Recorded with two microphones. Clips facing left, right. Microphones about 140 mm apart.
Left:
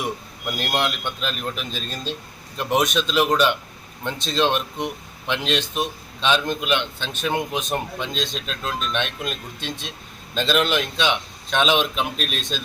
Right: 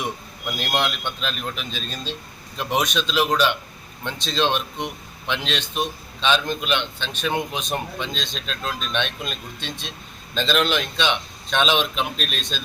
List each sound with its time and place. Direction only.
0.0 s a man's voice: 5° left (ahead or behind)